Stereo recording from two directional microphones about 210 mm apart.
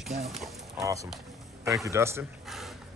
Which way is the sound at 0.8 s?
15° right (ahead or behind).